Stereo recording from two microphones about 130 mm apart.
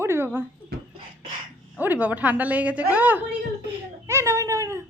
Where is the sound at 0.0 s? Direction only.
20° right (ahead or behind).